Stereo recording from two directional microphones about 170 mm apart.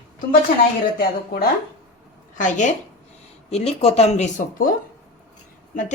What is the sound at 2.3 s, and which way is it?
Speech, 45° left (ahead or behind).